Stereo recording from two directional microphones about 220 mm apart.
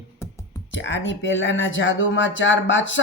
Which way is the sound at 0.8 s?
55° left (ahead or behind).